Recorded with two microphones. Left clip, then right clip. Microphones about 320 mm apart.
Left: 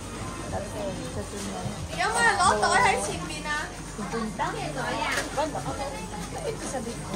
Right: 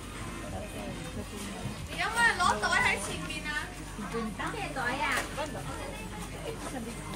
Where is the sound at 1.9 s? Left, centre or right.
Left.